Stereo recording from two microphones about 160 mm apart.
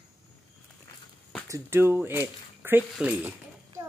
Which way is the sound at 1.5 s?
15° right (ahead or behind).